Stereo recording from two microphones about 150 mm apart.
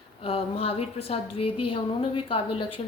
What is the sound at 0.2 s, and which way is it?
A woman's voice, 40° left (ahead or behind).